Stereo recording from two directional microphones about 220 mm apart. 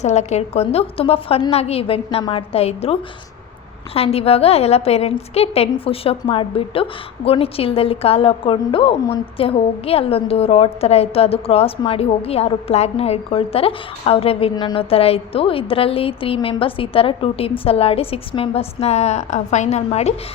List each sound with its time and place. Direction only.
0.0 s a woman's voice: 30° left (ahead or behind)